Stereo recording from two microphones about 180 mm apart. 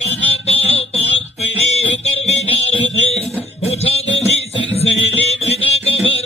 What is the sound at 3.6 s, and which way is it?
Music, 35° left (ahead or behind).